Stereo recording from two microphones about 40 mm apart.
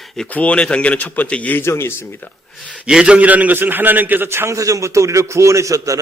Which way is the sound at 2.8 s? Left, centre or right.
Right.